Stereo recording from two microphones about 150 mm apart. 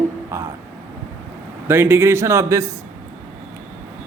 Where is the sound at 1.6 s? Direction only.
15° right (ahead or behind).